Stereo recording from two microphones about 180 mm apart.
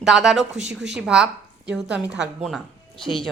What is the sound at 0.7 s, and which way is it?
A woman's voice, centre (ahead or behind).